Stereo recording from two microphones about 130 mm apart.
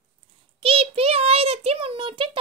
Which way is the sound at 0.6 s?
45° right (ahead or behind).